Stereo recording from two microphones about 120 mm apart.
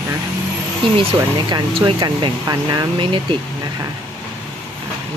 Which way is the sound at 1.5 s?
40° right (ahead or behind).